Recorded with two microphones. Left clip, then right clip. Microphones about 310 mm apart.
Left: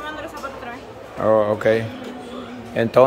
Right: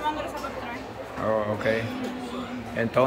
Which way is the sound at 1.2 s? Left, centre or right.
Left.